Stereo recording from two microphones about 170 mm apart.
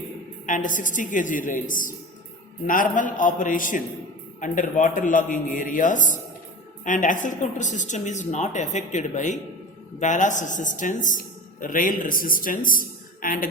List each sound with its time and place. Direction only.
0.4 s a woman's voice: 50° left (ahead or behind)